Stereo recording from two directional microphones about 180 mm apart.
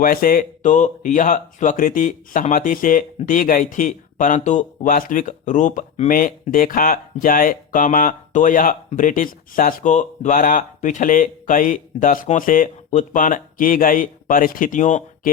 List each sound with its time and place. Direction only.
0.0 s speech: 55° left (ahead or behind)